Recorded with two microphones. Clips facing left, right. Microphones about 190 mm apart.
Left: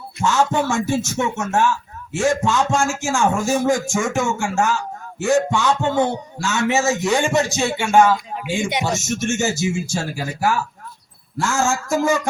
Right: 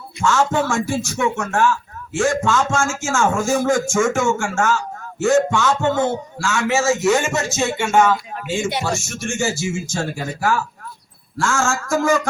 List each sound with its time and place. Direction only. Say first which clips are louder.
0.3 s a man's voice: even; 20° left (ahead or behind)